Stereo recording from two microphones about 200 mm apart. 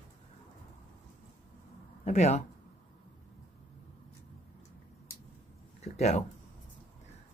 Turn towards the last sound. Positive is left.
turn(degrees=35)  # may be behind; listen again after turning